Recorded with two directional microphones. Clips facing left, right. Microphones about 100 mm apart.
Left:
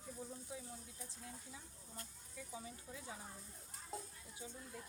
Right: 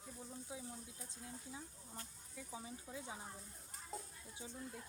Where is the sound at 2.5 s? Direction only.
25° right (ahead or behind).